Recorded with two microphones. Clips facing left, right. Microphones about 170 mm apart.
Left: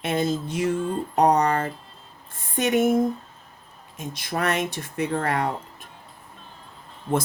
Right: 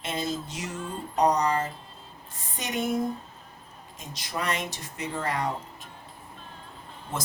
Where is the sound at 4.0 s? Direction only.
55° left (ahead or behind).